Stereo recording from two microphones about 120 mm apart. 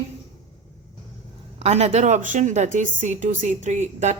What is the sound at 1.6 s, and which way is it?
A woman's voice, 60° right (ahead or behind).